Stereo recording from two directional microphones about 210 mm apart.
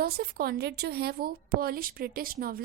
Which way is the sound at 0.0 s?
45° right (ahead or behind).